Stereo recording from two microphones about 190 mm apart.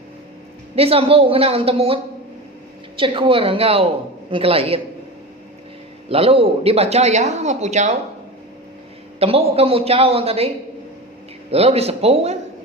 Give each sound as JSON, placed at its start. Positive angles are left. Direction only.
{"t": 0.8, "sound": "speech", "side_deg": -30}
{"t": 3.0, "sound": "a woman's voice", "side_deg": -30}
{"t": 6.1, "sound": "speech", "side_deg": -30}
{"t": 9.1, "sound": "speech", "side_deg": -30}
{"t": 11.5, "sound": "speech", "side_deg": -35}